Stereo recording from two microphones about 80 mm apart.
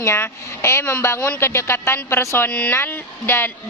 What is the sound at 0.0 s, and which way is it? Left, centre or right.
Speech, left.